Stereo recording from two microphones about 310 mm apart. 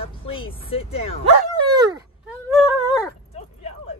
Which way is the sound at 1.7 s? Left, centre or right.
Centre.